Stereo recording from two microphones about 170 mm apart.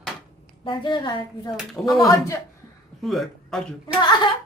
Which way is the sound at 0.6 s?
30° left (ahead or behind).